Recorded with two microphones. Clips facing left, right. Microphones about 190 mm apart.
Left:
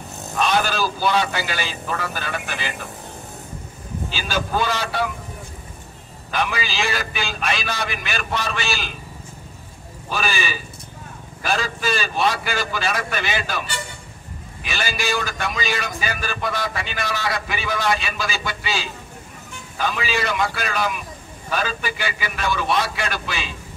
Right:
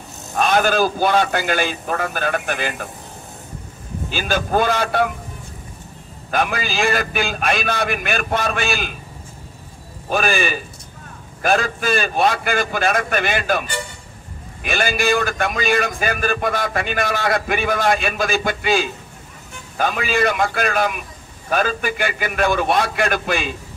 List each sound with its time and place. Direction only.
0.4 s a man's voice: 50° right (ahead or behind)
4.1 s a man's voice: 50° right (ahead or behind)
6.3 s a man's voice: 50° right (ahead or behind)
10.0 s a man's voice: 50° right (ahead or behind)